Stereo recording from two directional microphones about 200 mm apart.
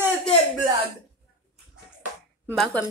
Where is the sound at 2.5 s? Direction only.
5° left (ahead or behind).